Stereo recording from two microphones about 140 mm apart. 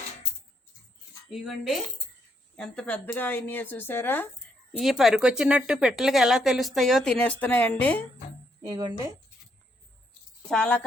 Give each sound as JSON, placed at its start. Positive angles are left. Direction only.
{"t": 1.3, "sound": "a woman's voice", "side_deg": 0}
{"t": 4.8, "sound": "a woman's voice", "side_deg": 0}
{"t": 8.7, "sound": "speech", "side_deg": -25}
{"t": 10.5, "sound": "speech", "side_deg": 10}